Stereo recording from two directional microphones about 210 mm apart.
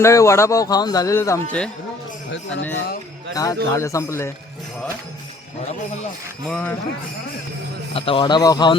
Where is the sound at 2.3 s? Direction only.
65° left (ahead or behind).